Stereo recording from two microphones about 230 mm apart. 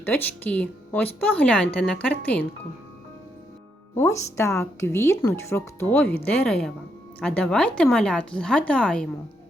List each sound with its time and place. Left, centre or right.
0.0 s speech: centre
3.9 s a woman's voice: centre